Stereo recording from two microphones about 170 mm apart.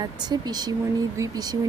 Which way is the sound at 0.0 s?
25° right (ahead or behind).